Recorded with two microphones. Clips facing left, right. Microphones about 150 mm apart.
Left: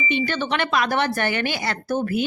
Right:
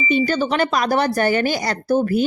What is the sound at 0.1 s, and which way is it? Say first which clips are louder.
Speech: right 6 dB; 40° right (ahead or behind).